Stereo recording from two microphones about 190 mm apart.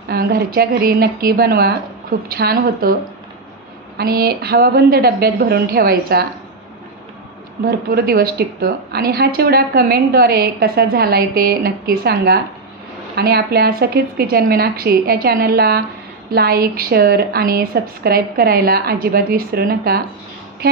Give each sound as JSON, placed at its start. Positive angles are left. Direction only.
{"t": 0.1, "sound": "a woman's voice", "side_deg": -55}
{"t": 4.0, "sound": "a woman's voice", "side_deg": -55}
{"t": 7.6, "sound": "a woman's voice", "side_deg": -50}